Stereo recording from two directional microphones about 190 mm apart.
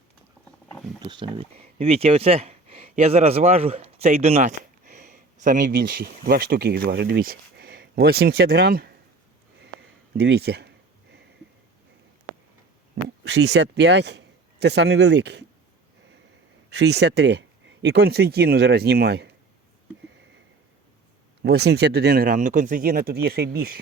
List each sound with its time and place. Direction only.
1.0 s speech: 25° right (ahead or behind); by 8.9 s 55° right (ahead or behind)
10.2 s speech: 60° right (ahead or behind)
13.2 s a man's voice: 65° right (ahead or behind)
16.6 s speech: 65° right (ahead or behind)
21.4 s speech: 60° right (ahead or behind)